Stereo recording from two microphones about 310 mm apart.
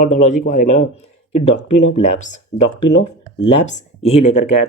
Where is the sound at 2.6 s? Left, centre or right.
Left.